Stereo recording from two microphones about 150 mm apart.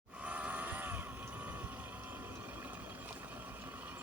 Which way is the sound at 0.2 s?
10° right (ahead or behind).